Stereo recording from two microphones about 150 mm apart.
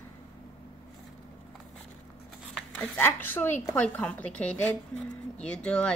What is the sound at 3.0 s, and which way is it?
A woman's voice, 15° left (ahead or behind).